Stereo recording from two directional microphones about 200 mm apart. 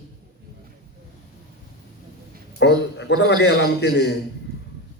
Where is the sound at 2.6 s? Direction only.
60° left (ahead or behind).